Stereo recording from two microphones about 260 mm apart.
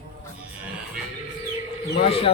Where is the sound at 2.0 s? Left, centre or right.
Left.